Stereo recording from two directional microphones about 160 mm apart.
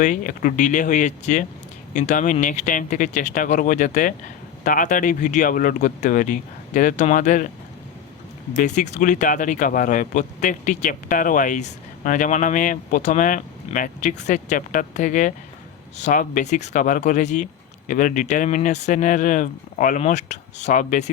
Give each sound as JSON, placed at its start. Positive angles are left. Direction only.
{"t": 0.0, "sound": "speech", "side_deg": 55}
{"t": 8.5, "sound": "speech", "side_deg": 50}